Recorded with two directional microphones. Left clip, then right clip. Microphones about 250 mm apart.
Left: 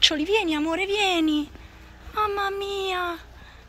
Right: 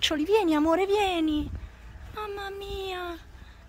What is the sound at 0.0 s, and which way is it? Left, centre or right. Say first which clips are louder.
Speech: left 3 dB; centre.